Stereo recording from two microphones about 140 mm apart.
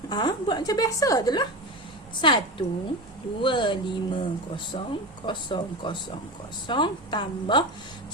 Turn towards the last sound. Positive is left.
turn(degrees=35)  # may be behind; listen again after turning